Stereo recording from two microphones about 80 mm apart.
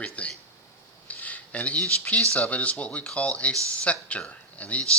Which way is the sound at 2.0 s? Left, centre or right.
Centre.